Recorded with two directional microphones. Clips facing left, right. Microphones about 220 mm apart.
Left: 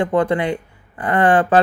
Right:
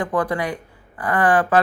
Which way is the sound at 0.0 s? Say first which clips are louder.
Left 5 dB; 25° left (ahead or behind).